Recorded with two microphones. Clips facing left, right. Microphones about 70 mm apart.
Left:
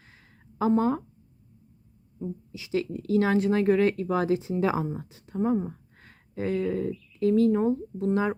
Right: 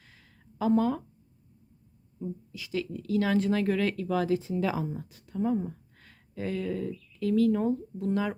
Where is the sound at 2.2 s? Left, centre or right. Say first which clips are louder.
Left 2 dB; left.